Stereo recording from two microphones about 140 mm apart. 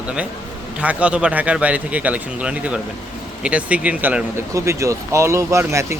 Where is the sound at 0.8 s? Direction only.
10° right (ahead or behind).